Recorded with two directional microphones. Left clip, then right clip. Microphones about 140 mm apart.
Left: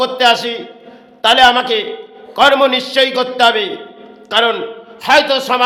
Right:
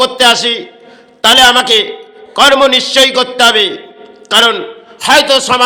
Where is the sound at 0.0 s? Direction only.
15° right (ahead or behind).